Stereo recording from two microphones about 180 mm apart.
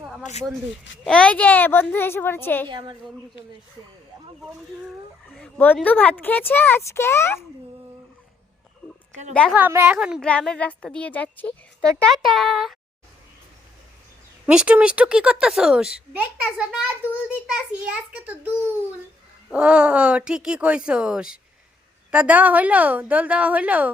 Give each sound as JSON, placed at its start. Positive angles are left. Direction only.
{"t": 0.2, "sound": "speech", "side_deg": 40}
{"t": 1.0, "sound": "speech", "side_deg": 5}
{"t": 2.6, "sound": "a woman's voice", "side_deg": -25}
{"t": 5.3, "sound": "speech", "side_deg": 5}
{"t": 9.3, "sound": "speech", "side_deg": 5}
{"t": 9.6, "sound": "a woman's voice", "side_deg": -10}
{"t": 10.2, "sound": "a woman's voice", "side_deg": 5}
{"t": 14.4, "sound": "a woman's voice", "side_deg": -5}